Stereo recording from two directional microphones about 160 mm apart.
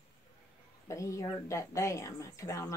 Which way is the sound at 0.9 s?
20° left (ahead or behind).